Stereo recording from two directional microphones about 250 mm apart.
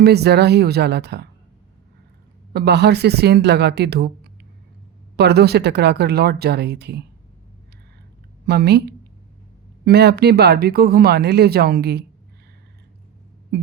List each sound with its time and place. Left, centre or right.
0.0 s speech: right
2.5 s speech: right
5.1 s speech: right
8.4 s speech: right